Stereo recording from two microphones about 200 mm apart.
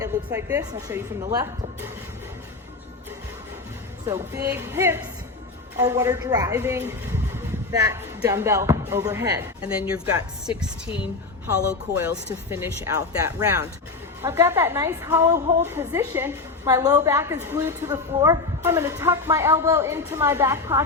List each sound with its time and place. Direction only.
0.0 s a woman's voice: 10° right (ahead or behind)
4.0 s a woman's voice: 15° right (ahead or behind)
11.7 s a woman's voice: 10° right (ahead or behind)